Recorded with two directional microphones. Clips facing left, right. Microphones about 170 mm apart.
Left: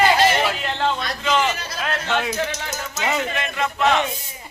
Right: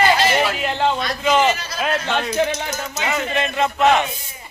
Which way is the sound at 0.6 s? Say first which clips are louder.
Right 3 dB; 15° right (ahead or behind).